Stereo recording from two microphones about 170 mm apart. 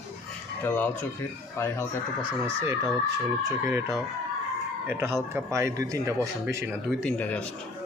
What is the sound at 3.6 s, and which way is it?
Speech, 15° right (ahead or behind).